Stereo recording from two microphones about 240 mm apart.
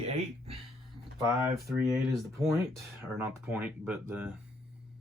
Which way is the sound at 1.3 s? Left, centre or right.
Centre.